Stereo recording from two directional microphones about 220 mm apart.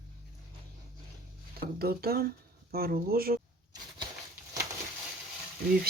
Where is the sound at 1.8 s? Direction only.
45° right (ahead or behind).